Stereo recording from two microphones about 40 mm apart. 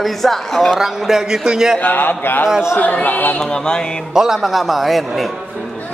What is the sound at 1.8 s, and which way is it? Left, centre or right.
Speech, left.